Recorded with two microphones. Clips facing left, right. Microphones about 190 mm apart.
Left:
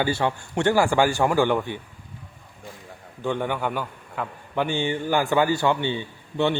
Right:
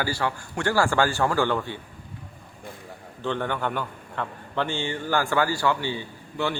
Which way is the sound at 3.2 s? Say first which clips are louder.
Left 2 dB; 10° left (ahead or behind).